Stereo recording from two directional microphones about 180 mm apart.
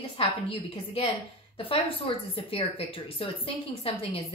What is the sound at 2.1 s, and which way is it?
A woman's voice, 30° left (ahead or behind).